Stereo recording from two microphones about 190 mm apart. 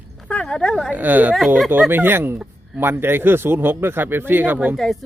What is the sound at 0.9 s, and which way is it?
Speech, 10° right (ahead or behind).